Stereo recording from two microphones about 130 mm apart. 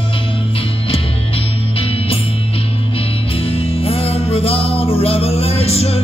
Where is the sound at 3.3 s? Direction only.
45° left (ahead or behind).